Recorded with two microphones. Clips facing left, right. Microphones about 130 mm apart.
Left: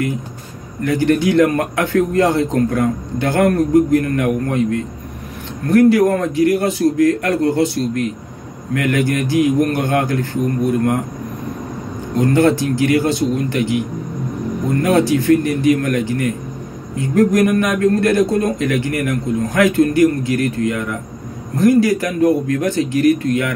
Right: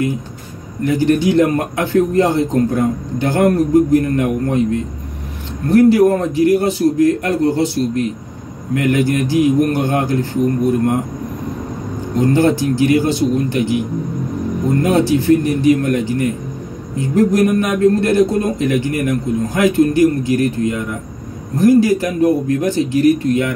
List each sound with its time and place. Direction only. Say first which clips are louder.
0.9 s a man's voice: even; 30° right (ahead or behind)
5.7 s a man's voice: right 1 dB; 30° right (ahead or behind)
12.2 s a man's voice: even; 30° right (ahead or behind)
14.8 s a man's voice: even; 25° right (ahead or behind)